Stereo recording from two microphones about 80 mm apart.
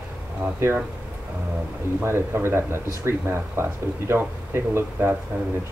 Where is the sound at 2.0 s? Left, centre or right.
Right.